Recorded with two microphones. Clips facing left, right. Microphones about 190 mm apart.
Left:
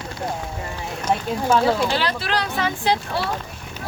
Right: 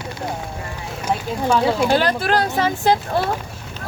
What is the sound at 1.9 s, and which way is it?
Speech, 50° right (ahead or behind).